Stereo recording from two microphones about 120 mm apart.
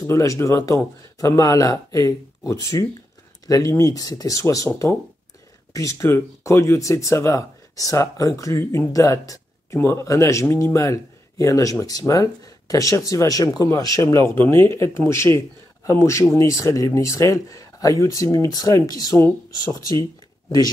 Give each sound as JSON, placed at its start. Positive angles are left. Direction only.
{"t": 0.0, "sound": "speech", "side_deg": 25}